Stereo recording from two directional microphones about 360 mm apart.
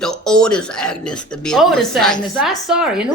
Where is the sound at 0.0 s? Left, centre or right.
Centre.